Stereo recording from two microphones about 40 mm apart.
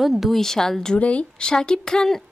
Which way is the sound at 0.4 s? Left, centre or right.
Centre.